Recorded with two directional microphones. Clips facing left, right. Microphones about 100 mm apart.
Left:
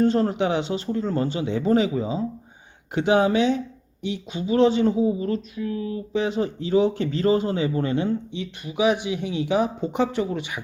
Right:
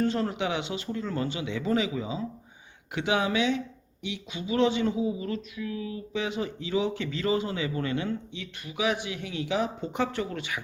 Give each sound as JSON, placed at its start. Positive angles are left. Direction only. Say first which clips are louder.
{"t": 0.0, "sound": "speech", "louder": "left 7 dB", "side_deg": 35}